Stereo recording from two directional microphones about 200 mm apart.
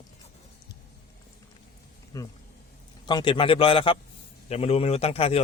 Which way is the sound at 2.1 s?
15° left (ahead or behind).